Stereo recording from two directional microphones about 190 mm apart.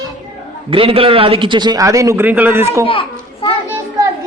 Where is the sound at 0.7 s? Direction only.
30° right (ahead or behind).